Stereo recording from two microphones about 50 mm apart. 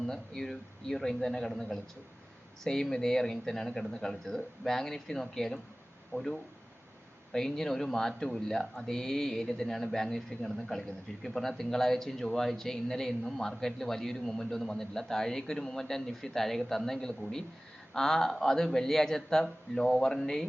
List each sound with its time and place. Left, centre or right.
0.1 s speech: centre
2.9 s speech: centre